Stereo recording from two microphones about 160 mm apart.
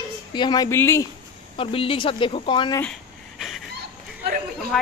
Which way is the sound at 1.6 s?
35° left (ahead or behind).